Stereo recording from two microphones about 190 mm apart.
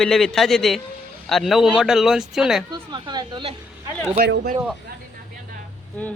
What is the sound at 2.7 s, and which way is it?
Speech, 20° right (ahead or behind).